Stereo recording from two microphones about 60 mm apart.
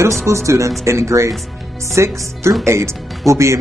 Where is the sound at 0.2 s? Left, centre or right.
Right.